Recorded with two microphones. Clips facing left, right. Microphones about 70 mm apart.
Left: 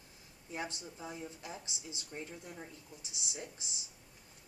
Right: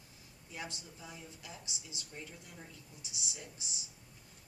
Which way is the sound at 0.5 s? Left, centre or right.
Left.